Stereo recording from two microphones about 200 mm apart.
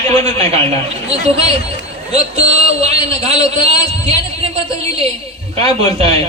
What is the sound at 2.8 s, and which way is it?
A man's voice, 30° right (ahead or behind).